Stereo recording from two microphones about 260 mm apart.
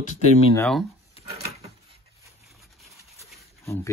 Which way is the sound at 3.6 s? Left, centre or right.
Centre.